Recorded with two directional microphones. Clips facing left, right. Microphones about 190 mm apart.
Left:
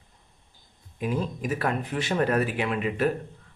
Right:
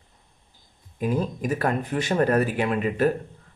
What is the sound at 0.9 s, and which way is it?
A man's voice, 45° right (ahead or behind).